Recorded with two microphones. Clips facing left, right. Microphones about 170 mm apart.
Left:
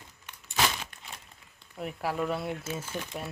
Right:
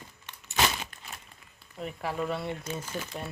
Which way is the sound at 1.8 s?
5° left (ahead or behind).